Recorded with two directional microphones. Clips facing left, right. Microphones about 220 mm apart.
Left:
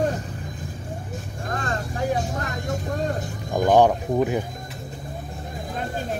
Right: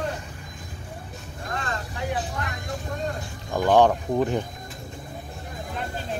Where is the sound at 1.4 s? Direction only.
45° left (ahead or behind).